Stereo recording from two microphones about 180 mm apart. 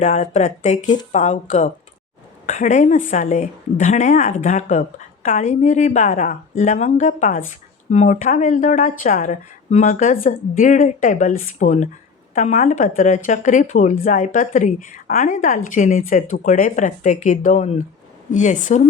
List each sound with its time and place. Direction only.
0.0 s speech: 40° left (ahead or behind)